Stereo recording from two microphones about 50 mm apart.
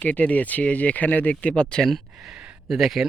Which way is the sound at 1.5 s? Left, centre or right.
Centre.